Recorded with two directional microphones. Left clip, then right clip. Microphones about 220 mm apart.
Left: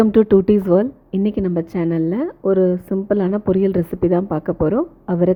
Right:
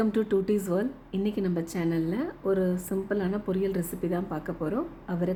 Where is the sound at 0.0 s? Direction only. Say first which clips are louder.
Left 13 dB; 35° left (ahead or behind).